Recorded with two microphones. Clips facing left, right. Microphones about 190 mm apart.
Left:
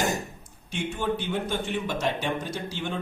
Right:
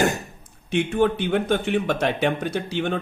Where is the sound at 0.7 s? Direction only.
60° right (ahead or behind).